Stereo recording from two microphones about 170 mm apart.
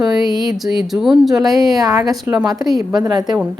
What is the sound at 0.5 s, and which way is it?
Speech, centre (ahead or behind).